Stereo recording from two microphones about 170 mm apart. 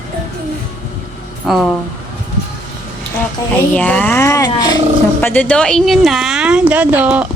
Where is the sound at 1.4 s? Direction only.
Centre (ahead or behind).